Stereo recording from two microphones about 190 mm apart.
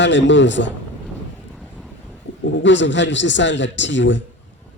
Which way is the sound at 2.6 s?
70° left (ahead or behind).